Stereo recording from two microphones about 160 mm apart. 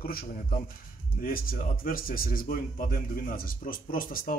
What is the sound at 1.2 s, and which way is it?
Speech, 60° left (ahead or behind).